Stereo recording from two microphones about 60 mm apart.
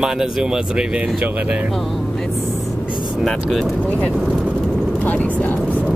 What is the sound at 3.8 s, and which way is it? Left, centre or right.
Speech, left.